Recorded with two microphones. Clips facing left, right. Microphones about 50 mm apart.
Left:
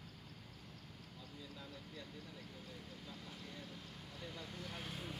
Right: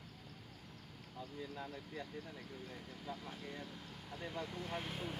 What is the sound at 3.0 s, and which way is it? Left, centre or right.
Speech, right.